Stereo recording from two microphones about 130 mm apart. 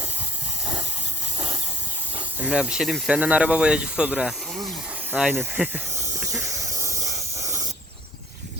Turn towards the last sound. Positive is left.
turn(degrees=-25)  # may be behind; listen again after turning